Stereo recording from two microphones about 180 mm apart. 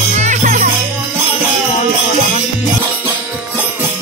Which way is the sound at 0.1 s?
40° right (ahead or behind).